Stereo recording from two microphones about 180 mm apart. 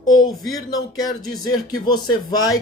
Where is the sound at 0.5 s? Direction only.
20° left (ahead or behind).